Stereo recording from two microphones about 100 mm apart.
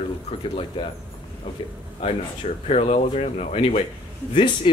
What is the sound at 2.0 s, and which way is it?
Speech, 90° left.